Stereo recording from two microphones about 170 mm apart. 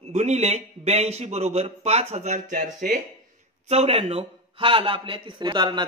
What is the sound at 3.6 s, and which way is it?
A man's voice, 40° right (ahead or behind).